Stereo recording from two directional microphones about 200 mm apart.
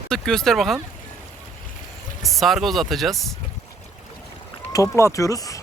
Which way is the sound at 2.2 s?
Centre (ahead or behind).